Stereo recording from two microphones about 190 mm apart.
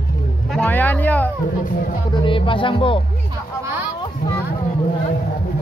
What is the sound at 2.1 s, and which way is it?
Speech, 25° left (ahead or behind).